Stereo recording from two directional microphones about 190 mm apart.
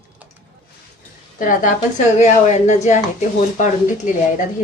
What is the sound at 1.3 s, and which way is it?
A woman's voice, 45° left (ahead or behind).